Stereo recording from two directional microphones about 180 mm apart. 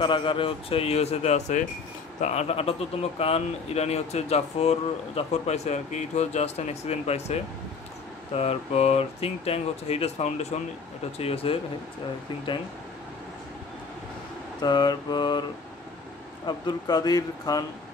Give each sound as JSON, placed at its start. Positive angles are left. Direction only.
{"t": 0.0, "sound": "speech", "side_deg": 25}
{"t": 8.4, "sound": "speech", "side_deg": 35}
{"t": 14.6, "sound": "speech", "side_deg": 25}
{"t": 16.4, "sound": "speech", "side_deg": 25}